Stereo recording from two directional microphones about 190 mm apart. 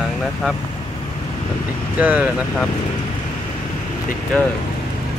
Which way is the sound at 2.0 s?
5° right (ahead or behind).